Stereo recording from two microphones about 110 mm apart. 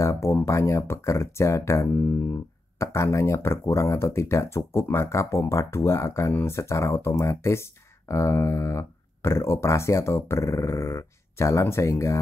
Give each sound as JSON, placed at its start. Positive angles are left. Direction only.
{"t": 0.0, "sound": "speech", "side_deg": 25}